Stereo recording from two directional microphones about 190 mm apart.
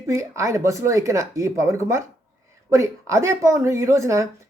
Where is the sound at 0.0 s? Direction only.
15° right (ahead or behind).